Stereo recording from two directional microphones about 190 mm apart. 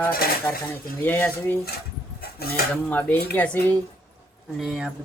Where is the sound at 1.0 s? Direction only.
10° left (ahead or behind).